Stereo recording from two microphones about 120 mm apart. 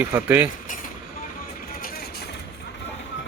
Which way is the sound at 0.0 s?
15° right (ahead or behind).